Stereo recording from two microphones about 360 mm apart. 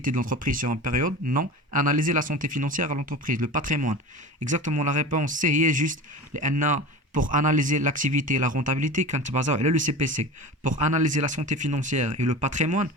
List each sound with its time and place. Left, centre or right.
0.0 s speech: right